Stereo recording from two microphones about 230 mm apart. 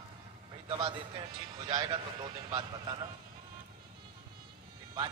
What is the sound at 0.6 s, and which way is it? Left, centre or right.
A man's voice, right.